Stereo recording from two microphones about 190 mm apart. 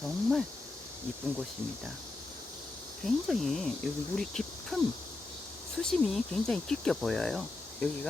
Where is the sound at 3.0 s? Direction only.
Centre (ahead or behind).